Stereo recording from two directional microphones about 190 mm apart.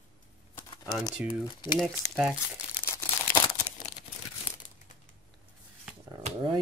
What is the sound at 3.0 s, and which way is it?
Crumpling, 10° left (ahead or behind).